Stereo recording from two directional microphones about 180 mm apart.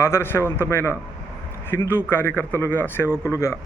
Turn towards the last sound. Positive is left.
turn(degrees=15)  # may be behind; listen again after turning